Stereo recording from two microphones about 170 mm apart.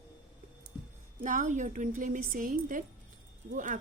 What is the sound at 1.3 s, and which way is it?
A woman's voice, 50° right (ahead or behind).